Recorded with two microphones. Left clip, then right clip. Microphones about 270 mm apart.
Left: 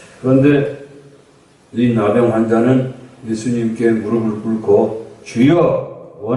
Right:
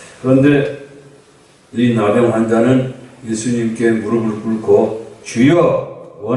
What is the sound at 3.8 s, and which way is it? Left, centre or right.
A man's voice, centre.